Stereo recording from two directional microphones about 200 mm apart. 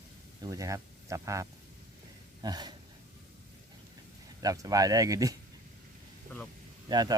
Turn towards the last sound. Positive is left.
turn(degrees=-20)  # may be behind; listen again after turning